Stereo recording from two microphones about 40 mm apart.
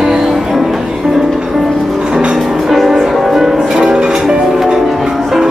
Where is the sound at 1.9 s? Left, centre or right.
Centre.